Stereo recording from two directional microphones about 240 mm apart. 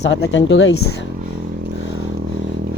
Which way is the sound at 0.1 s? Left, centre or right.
Left.